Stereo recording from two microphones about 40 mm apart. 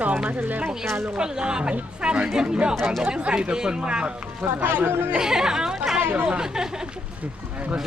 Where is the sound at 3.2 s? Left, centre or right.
Right.